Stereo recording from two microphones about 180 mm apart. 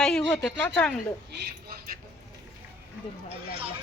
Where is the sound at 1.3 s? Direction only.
65° right (ahead or behind).